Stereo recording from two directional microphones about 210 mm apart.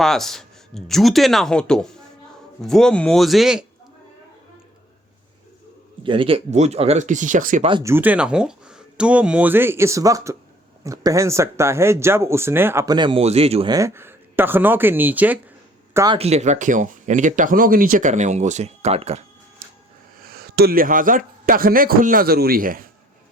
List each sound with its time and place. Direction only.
0.0 s speech: centre (ahead or behind)
6.0 s speech: 25° right (ahead or behind)
7.7 s speech: 15° right (ahead or behind)
13.7 s speech: 10° right (ahead or behind)
16.1 s speech: 30° right (ahead or behind)
20.1 s a man's voice: 45° right (ahead or behind)